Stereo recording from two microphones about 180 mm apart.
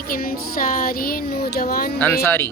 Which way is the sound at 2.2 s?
15° left (ahead or behind).